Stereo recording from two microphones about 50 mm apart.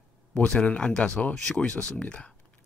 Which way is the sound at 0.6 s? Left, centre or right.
Left.